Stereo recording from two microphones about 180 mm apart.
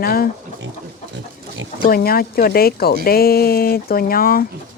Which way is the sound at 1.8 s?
55° left (ahead or behind).